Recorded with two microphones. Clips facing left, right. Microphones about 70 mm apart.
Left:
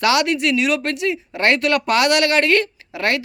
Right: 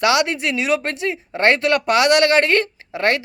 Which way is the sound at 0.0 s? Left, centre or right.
Centre.